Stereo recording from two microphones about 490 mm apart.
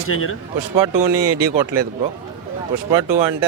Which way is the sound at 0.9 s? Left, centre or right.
Right.